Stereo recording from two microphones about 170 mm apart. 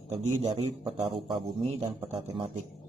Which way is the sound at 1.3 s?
25° right (ahead or behind).